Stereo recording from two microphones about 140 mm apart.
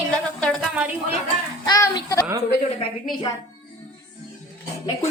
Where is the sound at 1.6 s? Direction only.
30° left (ahead or behind).